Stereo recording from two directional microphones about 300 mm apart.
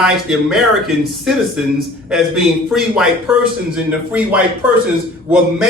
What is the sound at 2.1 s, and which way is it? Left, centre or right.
A man's voice, centre.